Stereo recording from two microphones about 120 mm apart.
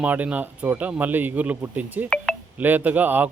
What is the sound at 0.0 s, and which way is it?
A man's voice, 10° right (ahead or behind).